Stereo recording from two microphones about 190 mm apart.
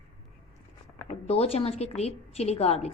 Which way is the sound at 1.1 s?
35° left (ahead or behind).